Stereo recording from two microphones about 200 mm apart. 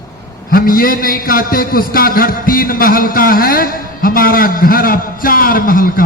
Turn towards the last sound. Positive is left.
turn(degrees=45)  # may be behind; listen again after turning